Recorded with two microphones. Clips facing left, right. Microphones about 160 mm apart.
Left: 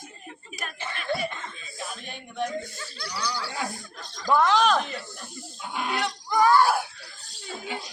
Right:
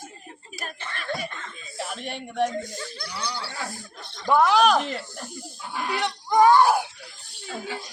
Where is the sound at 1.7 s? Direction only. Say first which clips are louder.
Right 7 dB; 70° right (ahead or behind).